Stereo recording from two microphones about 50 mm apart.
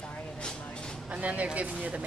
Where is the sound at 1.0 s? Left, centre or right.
Right.